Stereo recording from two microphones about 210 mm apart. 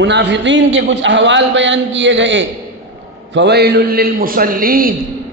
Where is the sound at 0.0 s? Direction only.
55° right (ahead or behind).